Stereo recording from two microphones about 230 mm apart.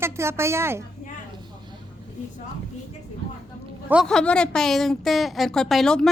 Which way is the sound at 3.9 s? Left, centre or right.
Centre.